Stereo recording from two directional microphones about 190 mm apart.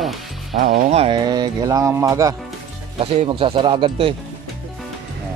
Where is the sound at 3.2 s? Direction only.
25° right (ahead or behind).